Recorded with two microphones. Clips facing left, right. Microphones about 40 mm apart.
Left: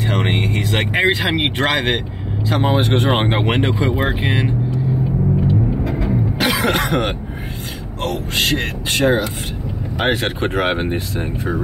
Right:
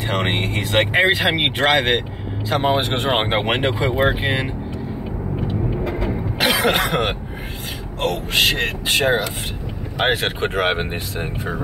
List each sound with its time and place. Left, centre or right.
0.0 s speech: centre
5.9 s vehicle: centre
8.0 s speech: centre